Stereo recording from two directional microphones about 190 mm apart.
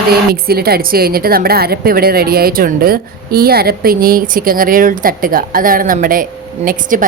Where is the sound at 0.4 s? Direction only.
55° right (ahead or behind).